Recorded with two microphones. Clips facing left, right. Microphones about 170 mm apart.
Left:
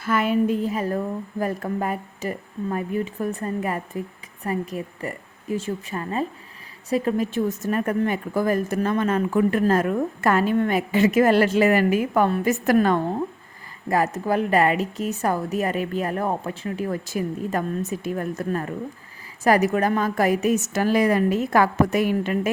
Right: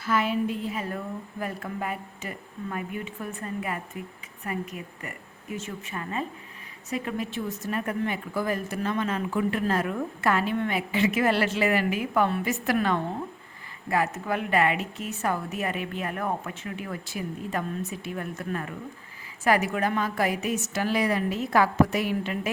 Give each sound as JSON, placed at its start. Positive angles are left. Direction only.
{"t": 0.0, "sound": "speech", "side_deg": 55}